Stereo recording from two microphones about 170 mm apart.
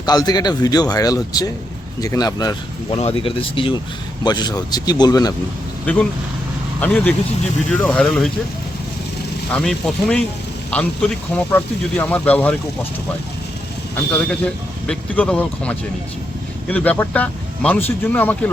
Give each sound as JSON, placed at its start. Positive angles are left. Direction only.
{"t": 0.0, "sound": "speech", "side_deg": 25}
{"t": 2.9, "sound": "speech", "side_deg": 35}
{"t": 5.8, "sound": "speech", "side_deg": 10}
{"t": 9.5, "sound": "speech", "side_deg": 5}
{"t": 13.9, "sound": "speech", "side_deg": 5}